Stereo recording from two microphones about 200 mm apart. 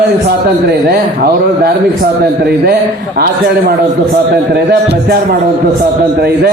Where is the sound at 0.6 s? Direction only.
45° right (ahead or behind).